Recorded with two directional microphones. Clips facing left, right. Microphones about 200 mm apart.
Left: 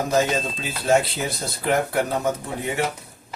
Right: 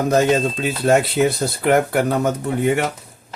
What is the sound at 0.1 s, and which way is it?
Speech, 55° right (ahead or behind).